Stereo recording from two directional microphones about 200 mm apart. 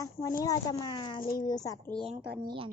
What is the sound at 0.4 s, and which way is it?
Speech, 20° left (ahead or behind).